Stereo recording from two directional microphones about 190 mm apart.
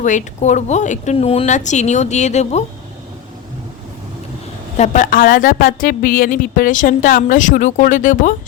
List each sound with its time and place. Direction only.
0.0 s speech: 40° left (ahead or behind)
4.8 s a woman's voice: 45° left (ahead or behind)